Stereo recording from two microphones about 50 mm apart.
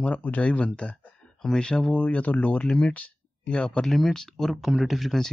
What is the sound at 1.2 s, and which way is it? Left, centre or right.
Speech, centre.